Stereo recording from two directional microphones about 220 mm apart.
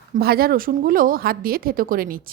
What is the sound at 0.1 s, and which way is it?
A woman's voice, 45° right (ahead or behind).